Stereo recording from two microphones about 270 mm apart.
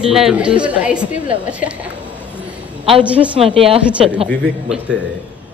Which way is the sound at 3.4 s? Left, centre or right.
Right.